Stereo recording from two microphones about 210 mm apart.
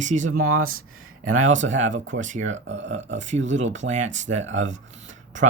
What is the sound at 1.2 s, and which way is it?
Speech, 75° right (ahead or behind).